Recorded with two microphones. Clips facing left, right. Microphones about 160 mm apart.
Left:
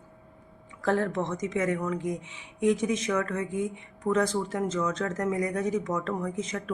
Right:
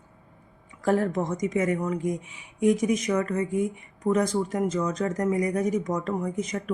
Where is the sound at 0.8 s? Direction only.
15° right (ahead or behind).